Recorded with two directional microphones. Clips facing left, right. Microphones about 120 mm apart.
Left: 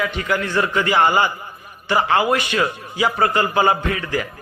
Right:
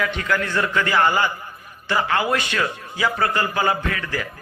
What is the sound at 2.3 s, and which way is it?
A man's voice, 15° left (ahead or behind).